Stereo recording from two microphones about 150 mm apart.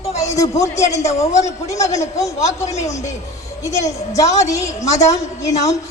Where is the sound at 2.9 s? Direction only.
20° left (ahead or behind).